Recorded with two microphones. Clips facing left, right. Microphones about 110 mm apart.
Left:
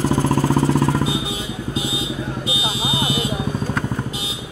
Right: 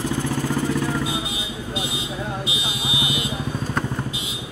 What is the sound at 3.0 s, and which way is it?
Vehicle, 45° left (ahead or behind).